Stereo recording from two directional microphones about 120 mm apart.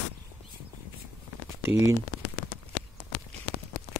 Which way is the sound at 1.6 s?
20° right (ahead or behind).